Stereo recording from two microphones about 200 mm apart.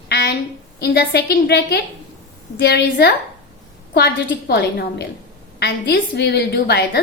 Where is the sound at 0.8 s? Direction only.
55° left (ahead or behind).